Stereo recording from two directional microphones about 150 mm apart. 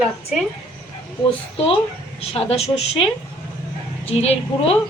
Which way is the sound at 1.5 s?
40° left (ahead or behind).